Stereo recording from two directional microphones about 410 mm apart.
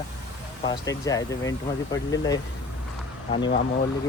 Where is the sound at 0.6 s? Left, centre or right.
Centre.